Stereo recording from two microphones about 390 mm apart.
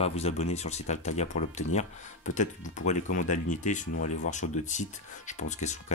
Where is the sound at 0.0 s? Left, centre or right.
Centre.